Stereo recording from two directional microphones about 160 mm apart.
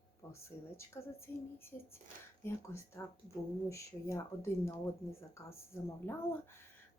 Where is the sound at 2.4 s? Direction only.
15° left (ahead or behind).